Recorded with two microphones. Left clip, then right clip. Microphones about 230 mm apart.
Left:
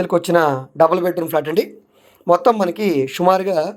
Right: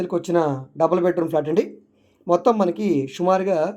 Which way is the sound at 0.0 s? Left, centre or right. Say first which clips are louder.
Left 6 dB; centre.